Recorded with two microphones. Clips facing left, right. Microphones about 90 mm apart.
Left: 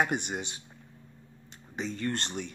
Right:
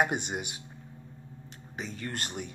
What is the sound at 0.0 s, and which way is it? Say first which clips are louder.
Speech: right 1 dB; 15° right (ahead or behind).